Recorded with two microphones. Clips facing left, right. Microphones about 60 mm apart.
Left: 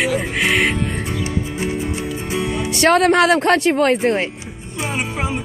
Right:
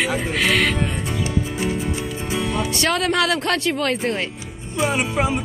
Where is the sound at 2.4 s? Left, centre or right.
Centre.